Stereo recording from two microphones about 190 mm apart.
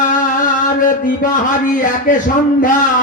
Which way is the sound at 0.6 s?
45° left (ahead or behind).